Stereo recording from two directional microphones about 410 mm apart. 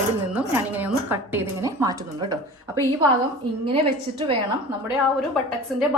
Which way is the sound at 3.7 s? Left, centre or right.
Centre.